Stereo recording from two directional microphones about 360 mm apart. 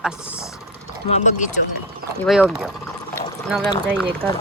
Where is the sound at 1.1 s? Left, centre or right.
Centre.